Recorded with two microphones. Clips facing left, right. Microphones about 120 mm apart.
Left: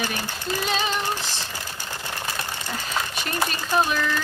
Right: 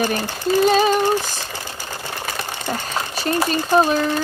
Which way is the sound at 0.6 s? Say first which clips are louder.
Right 11 dB; 45° right (ahead or behind).